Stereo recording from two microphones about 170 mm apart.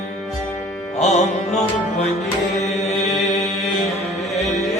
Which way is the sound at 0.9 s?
45° left (ahead or behind).